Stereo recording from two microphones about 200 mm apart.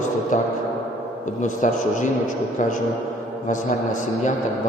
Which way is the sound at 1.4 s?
40° left (ahead or behind).